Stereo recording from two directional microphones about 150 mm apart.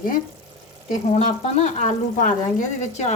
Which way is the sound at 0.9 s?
50° left (ahead or behind).